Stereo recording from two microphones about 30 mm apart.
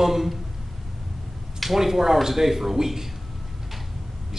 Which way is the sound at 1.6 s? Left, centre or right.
Centre.